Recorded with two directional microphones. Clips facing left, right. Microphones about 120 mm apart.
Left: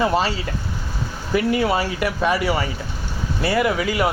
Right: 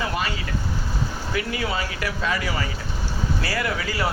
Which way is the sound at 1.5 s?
25° left (ahead or behind).